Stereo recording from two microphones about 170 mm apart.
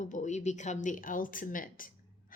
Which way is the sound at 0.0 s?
45° left (ahead or behind).